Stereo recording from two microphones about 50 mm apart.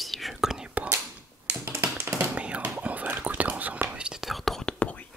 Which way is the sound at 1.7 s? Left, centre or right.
Right.